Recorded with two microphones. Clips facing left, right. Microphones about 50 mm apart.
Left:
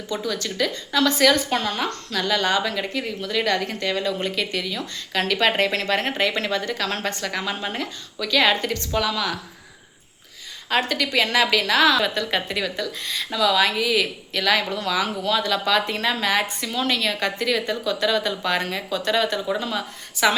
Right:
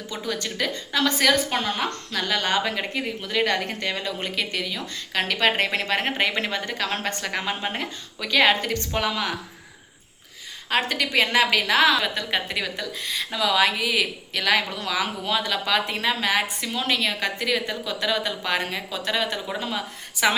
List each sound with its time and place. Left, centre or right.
0.1 s a woman's voice: right
10.7 s a woman's voice: centre